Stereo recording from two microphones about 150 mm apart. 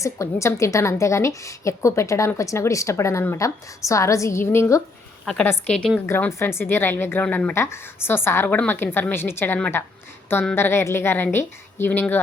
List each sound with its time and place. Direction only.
0.0 s a woman's voice: 20° left (ahead or behind)
5.2 s a woman's voice: 5° left (ahead or behind)